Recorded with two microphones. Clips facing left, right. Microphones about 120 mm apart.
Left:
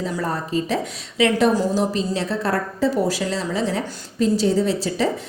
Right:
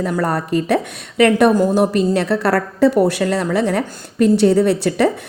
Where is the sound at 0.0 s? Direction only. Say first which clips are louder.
Right 6 dB; 65° right (ahead or behind).